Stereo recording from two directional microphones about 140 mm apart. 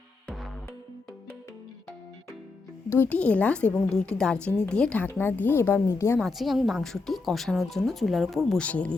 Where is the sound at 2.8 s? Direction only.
15° left (ahead or behind).